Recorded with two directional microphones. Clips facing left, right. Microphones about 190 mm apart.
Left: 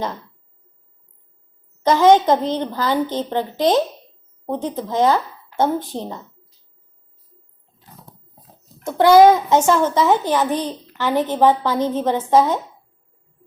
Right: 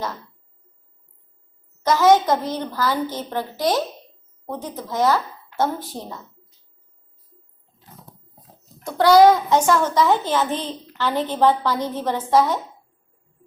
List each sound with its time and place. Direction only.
1.8 s a woman's voice: 20° left (ahead or behind)
8.8 s a woman's voice: 20° left (ahead or behind)